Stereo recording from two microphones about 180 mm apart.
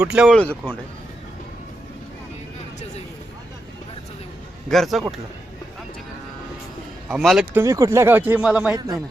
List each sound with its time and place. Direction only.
0.0 s speech: 5° right (ahead or behind)
4.7 s speech: centre (ahead or behind)
7.1 s speech: centre (ahead or behind)
7.6 s speech: 15° right (ahead or behind)